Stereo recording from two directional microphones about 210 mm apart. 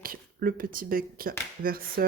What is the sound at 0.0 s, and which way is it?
Speech, 45° right (ahead or behind).